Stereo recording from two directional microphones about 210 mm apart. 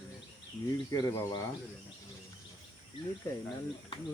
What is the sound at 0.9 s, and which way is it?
Speech, 20° left (ahead or behind).